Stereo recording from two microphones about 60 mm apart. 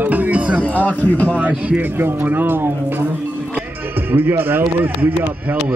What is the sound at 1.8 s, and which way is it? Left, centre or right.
Speech, right.